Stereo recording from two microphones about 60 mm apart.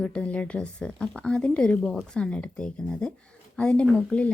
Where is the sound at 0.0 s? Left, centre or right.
Centre.